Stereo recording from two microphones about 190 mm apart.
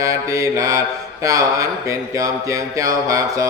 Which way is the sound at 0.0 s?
15° right (ahead or behind).